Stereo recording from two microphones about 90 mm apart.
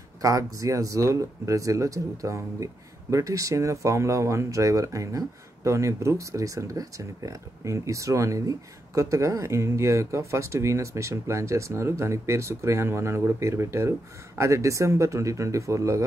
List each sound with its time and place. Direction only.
0.2 s speech: 40° right (ahead or behind)